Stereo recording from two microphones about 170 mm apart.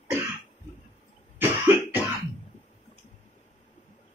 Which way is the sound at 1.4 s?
15° right (ahead or behind).